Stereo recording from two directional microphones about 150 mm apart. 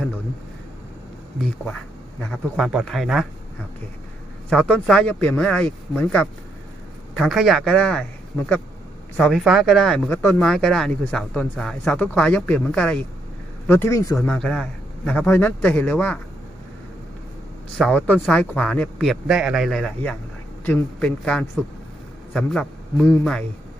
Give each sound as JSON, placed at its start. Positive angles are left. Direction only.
{"t": 2.3, "sound": "speech", "side_deg": 0}
{"t": 4.4, "sound": "a man's voice", "side_deg": 5}
{"t": 10.1, "sound": "speech", "side_deg": 15}
{"t": 10.4, "sound": "speech", "side_deg": 5}
{"t": 14.2, "sound": "a man's voice", "side_deg": 5}
{"t": 17.9, "sound": "speech", "side_deg": 10}
{"t": 19.3, "sound": "a man's voice", "side_deg": -5}